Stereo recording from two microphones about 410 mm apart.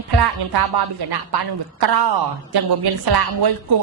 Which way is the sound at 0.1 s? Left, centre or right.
Right.